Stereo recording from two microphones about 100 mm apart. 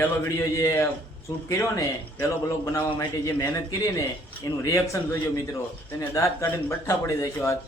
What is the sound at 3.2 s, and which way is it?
A man's voice, 30° left (ahead or behind).